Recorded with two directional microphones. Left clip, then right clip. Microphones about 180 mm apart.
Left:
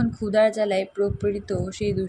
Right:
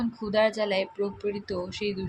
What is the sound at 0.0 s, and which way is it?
Speech, 30° left (ahead or behind).